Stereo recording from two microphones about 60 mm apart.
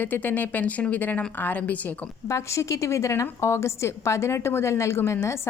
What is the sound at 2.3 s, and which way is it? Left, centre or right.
A woman's voice, left.